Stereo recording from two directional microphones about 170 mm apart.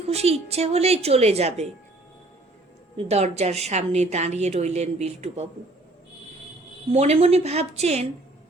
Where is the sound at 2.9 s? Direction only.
40° right (ahead or behind).